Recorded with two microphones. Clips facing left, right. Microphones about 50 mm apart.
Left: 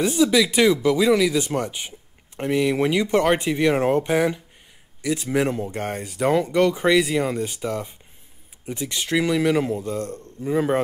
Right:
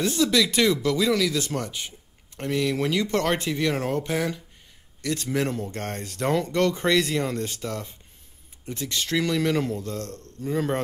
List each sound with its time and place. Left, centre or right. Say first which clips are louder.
0.0 s speech: left 4 dB; centre
5.0 s speech: left 4 dB; centre